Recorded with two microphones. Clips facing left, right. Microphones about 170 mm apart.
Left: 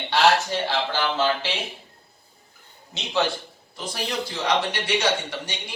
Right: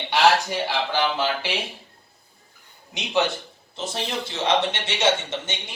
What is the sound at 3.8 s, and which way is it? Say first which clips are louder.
Speech: even; 25° right (ahead or behind).